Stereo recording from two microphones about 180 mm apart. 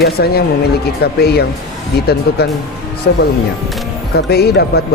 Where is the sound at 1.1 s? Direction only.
65° left (ahead or behind).